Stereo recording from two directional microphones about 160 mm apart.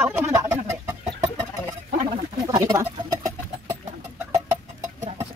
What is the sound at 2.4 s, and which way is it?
Chicken, 20° right (ahead or behind).